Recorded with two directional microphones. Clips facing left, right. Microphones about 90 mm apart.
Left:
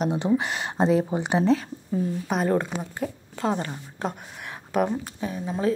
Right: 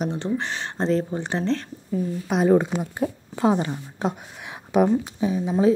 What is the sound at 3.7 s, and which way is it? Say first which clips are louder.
A woman's voice: right 4 dB; centre (ahead or behind).